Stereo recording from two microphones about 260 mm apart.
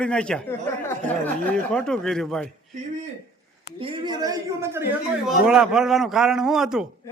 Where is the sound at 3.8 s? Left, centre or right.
Centre.